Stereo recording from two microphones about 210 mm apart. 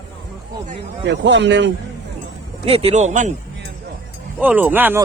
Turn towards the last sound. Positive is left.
turn(degrees=-10)  # may be behind; listen again after turning